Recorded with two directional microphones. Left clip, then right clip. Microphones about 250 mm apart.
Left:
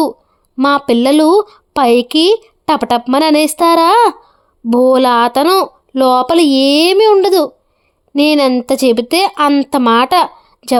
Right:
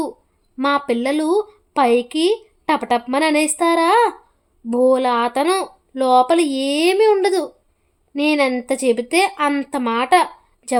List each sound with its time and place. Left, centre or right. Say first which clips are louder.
0.5 s speech: left 7 dB; left